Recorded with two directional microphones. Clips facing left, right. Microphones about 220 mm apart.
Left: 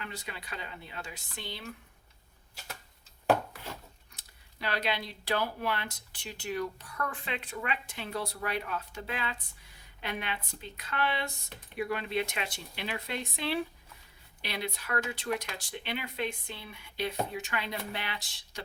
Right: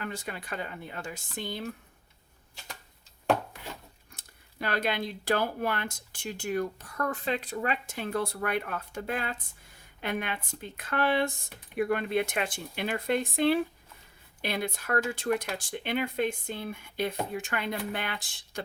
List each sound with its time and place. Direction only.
0.0 s speech: 50° right (ahead or behind)
4.1 s speech: 50° right (ahead or behind)